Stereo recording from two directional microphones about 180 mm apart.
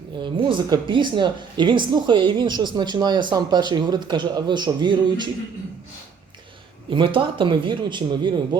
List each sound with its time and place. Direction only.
0.2 s a woman's voice: 25° right (ahead or behind)
6.9 s a woman's voice: 25° right (ahead or behind)